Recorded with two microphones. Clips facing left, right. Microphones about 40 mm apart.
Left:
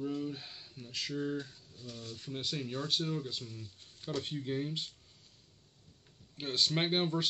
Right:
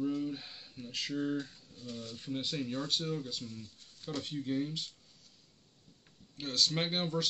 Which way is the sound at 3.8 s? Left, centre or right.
Left.